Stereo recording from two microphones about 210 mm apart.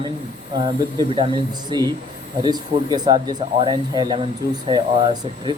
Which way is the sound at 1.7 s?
20° right (ahead or behind).